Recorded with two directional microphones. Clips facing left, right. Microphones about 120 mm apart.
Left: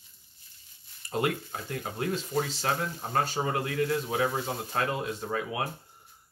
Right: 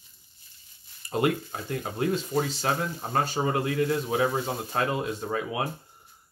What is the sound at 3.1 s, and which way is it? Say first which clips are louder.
Speech: right 2 dB; 15° right (ahead or behind).